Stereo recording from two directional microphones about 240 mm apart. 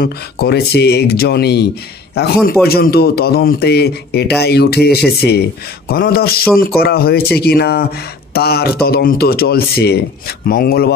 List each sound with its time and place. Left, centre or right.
0.0 s speech: left